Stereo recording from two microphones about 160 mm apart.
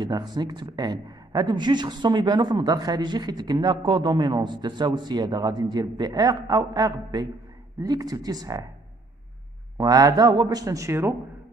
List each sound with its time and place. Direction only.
0.0 s speech: 25° right (ahead or behind)
9.8 s speech: 25° right (ahead or behind)